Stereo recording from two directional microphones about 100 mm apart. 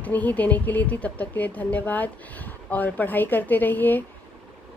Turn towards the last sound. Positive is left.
turn(degrees=20)  # may be behind; listen again after turning